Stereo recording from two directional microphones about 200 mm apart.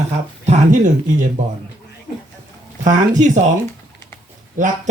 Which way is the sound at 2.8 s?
40° right (ahead or behind).